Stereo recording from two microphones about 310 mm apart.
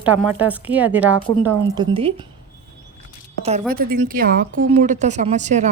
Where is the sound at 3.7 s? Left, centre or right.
Right.